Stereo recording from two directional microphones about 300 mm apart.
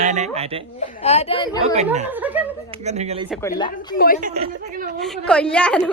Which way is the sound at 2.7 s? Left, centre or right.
Right.